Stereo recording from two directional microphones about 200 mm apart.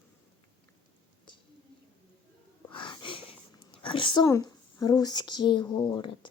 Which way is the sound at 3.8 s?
25° left (ahead or behind).